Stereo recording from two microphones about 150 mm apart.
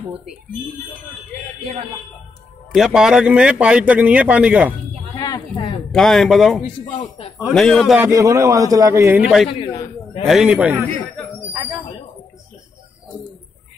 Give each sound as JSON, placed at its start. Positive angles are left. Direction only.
{"t": 2.7, "sound": "speech", "side_deg": -5}
{"t": 5.1, "sound": "a sound", "side_deg": 25}
{"t": 5.9, "sound": "speech", "side_deg": 0}
{"t": 6.9, "sound": "a man's voice", "side_deg": 35}
{"t": 7.5, "sound": "speech", "side_deg": 0}
{"t": 8.0, "sound": "a man's voice", "side_deg": -20}
{"t": 9.5, "sound": "a man's voice", "side_deg": 35}
{"t": 10.2, "sound": "speech", "side_deg": -5}